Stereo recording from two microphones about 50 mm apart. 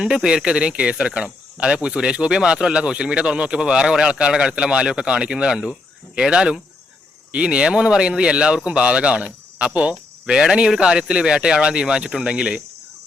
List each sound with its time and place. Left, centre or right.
0.0 s speech: centre